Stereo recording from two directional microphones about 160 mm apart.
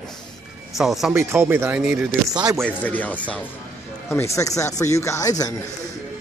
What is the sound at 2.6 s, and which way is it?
Speech, 10° left (ahead or behind).